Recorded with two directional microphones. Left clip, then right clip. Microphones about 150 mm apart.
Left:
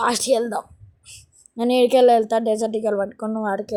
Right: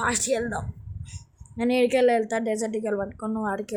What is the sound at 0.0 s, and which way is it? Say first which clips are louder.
A woman's voice: left 6 dB; 35° left (ahead or behind).